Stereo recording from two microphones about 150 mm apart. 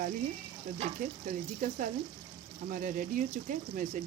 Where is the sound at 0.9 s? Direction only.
65° right (ahead or behind).